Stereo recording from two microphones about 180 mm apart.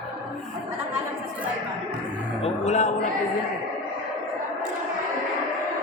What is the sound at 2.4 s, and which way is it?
Speech, 40° left (ahead or behind).